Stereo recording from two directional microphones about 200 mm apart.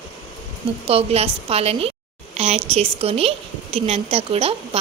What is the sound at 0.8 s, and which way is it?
A woman's voice, 30° right (ahead or behind).